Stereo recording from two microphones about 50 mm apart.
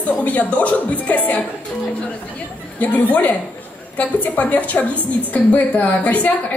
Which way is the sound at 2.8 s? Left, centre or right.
Left.